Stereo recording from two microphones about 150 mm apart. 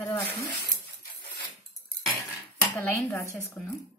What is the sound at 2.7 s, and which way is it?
Speech, 20° left (ahead or behind).